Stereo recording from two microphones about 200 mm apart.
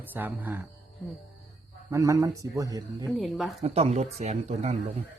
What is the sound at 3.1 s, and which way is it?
Speech, centre (ahead or behind).